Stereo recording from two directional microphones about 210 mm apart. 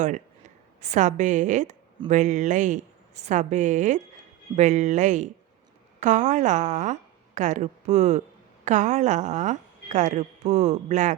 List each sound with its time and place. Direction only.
0.0 s a woman's voice: 35° right (ahead or behind)